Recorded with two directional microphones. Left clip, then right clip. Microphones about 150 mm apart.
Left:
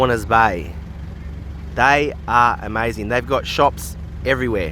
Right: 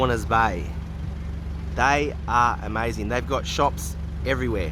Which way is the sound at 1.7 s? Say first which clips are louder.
Left 6 dB; 35° left (ahead or behind).